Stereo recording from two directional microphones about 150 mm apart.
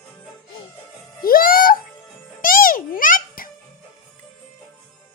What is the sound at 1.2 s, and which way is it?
Music, 75° left (ahead or behind).